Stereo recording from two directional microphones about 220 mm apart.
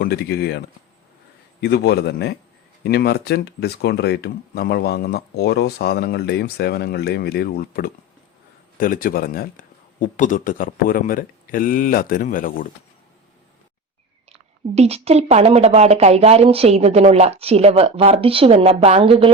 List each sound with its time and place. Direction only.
0.0 s speech: 45° left (ahead or behind)
1.6 s a man's voice: 45° left (ahead or behind)
14.3 s a woman's voice: 30° right (ahead or behind)